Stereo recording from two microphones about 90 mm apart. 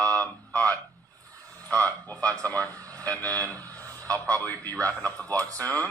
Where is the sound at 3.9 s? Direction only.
40° right (ahead or behind).